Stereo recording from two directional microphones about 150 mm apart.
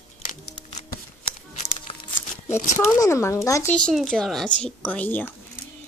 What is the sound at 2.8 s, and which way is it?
Speech, 20° left (ahead or behind).